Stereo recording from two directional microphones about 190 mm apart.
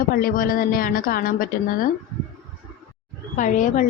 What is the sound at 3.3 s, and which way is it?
Speech, 45° left (ahead or behind).